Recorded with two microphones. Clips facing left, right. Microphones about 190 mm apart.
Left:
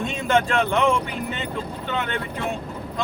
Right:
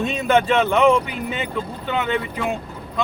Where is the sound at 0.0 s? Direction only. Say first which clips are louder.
Right 3 dB; 5° right (ahead or behind).